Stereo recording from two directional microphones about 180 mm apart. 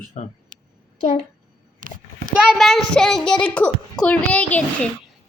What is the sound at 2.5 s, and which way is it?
A child's voice, centre (ahead or behind).